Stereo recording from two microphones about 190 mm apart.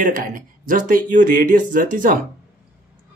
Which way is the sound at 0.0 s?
45° right (ahead or behind).